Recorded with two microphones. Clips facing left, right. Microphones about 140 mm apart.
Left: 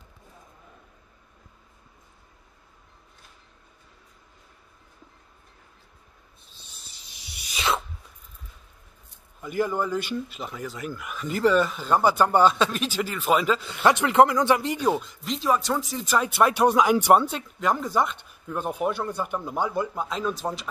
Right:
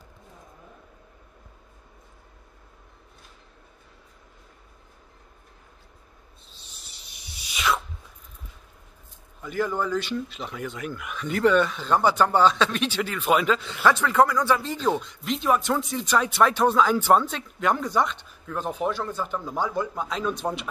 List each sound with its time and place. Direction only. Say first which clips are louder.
7.5 s a sound: right 1 dB; 30° left (ahead or behind)
9.4 s speech: left 1 dB; 10° left (ahead or behind)
13.8 s speech: left 2 dB; 20° left (ahead or behind); by 20.3 s centre (ahead or behind)